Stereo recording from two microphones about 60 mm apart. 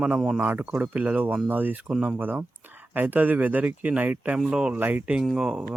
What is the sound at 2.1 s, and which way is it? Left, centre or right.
Speech, right.